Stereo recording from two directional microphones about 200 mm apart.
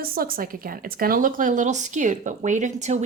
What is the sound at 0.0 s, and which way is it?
Speech, 45° right (ahead or behind).